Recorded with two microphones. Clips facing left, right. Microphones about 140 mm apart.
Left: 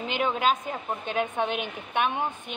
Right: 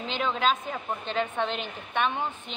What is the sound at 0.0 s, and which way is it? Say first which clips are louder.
A woman's voice: left 1 dB; 10° left (ahead or behind).